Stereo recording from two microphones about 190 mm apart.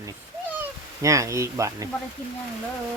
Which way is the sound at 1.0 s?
15° right (ahead or behind).